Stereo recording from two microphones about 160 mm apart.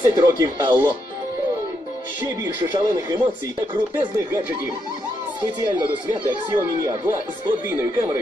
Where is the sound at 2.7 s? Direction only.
25° right (ahead or behind).